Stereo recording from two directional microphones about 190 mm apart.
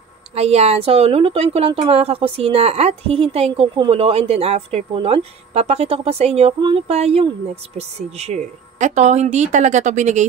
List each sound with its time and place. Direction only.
0.3 s a woman's voice: 35° right (ahead or behind)